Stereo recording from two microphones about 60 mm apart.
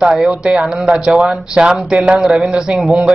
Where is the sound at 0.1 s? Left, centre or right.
Centre.